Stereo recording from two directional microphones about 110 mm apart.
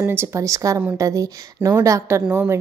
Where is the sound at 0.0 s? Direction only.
20° right (ahead or behind).